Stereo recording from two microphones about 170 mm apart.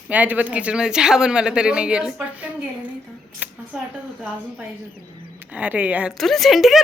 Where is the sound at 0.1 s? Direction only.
10° right (ahead or behind).